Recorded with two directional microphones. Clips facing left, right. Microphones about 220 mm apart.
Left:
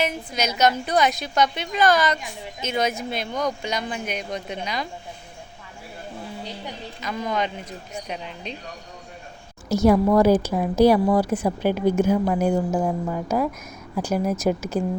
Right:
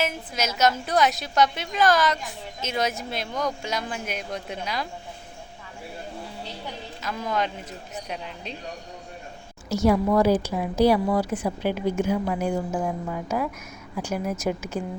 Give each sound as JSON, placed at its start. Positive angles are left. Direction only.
{"t": 0.0, "sound": "speech", "side_deg": 0}
{"t": 7.0, "sound": "speech", "side_deg": -5}
{"t": 9.6, "sound": "speech", "side_deg": 45}